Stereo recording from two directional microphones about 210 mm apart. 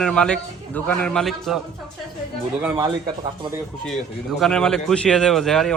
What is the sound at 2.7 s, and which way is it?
Speech, 20° right (ahead or behind).